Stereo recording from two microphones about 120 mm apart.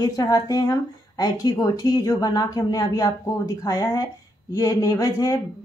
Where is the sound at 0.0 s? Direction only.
30° left (ahead or behind).